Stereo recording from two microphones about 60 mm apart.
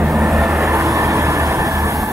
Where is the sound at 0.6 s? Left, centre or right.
Right.